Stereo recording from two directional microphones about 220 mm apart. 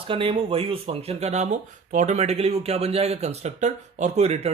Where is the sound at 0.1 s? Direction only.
25° right (ahead or behind).